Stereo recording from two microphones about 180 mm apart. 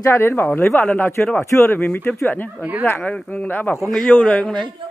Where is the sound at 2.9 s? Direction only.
10° left (ahead or behind).